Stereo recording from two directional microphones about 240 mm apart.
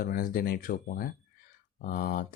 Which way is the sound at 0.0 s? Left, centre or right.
Left.